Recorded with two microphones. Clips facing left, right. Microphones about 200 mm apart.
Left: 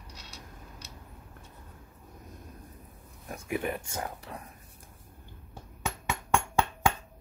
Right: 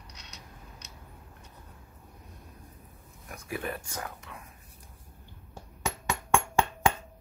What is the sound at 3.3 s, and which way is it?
Speech, 20° left (ahead or behind).